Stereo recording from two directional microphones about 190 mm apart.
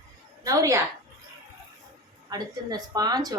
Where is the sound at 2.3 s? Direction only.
20° right (ahead or behind).